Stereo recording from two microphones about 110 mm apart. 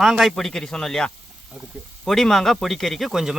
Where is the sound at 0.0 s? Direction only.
5° right (ahead or behind).